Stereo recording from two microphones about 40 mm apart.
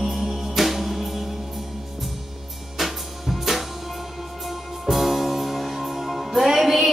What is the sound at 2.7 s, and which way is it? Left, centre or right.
Music, centre.